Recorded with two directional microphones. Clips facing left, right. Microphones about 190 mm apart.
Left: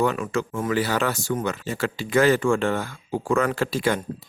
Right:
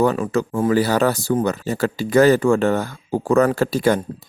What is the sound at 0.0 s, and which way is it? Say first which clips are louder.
A man's voice: right 5 dB; 35° right (ahead or behind).